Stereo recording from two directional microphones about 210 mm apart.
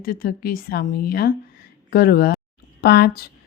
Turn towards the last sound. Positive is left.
turn(degrees=50)  # may be behind; listen again after turning